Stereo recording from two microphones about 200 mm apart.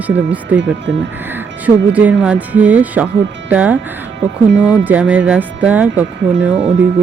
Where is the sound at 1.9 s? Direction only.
5° right (ahead or behind).